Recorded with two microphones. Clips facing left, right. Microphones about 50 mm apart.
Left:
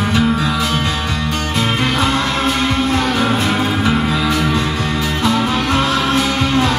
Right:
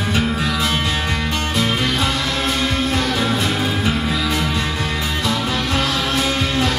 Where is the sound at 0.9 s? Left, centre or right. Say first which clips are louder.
Left 1 dB; right.